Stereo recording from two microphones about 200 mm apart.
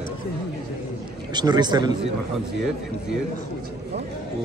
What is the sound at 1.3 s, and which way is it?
Speech, 20° right (ahead or behind).